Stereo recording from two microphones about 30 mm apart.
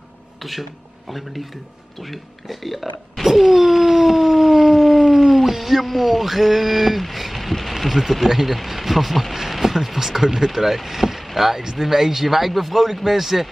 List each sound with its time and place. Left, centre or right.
0.4 s speech: centre
2.0 s speech: centre
3.3 s a sound: centre
7.6 s a man's voice: centre